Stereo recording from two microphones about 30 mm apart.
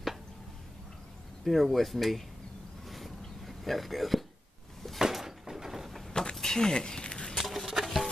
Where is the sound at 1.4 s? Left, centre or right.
Centre.